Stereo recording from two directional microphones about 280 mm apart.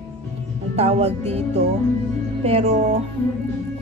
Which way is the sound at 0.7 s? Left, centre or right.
Right.